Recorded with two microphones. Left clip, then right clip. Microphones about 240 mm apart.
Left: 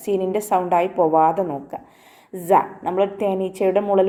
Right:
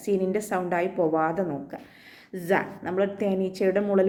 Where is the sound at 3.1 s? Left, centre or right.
Left.